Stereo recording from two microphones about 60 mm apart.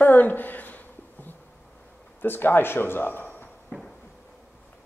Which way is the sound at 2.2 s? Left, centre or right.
Left.